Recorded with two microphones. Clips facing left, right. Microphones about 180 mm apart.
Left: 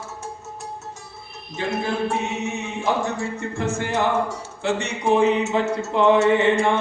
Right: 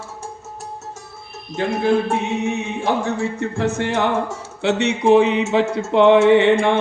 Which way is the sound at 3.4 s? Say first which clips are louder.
Right 4 dB; 70° right (ahead or behind).